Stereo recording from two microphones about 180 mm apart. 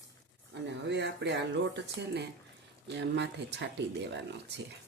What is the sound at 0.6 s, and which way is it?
Speech, 75° right (ahead or behind).